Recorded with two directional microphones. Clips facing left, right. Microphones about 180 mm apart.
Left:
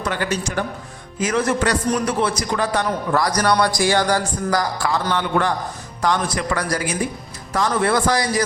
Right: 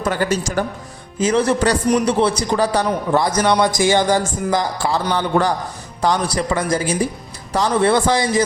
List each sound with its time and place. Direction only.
0.0 s a man's voice: 40° right (ahead or behind)
1.2 s a man's voice: 30° right (ahead or behind)